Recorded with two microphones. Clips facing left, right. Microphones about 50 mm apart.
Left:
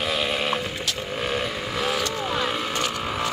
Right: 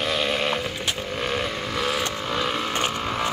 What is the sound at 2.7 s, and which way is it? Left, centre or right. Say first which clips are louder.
Vehicle: right 1 dB; right.